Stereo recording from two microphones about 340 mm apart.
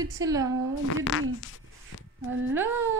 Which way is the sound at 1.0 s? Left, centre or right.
Left.